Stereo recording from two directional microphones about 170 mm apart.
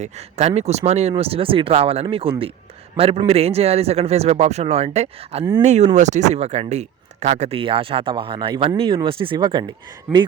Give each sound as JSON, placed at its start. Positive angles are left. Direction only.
{"t": 0.0, "sound": "speech", "side_deg": -40}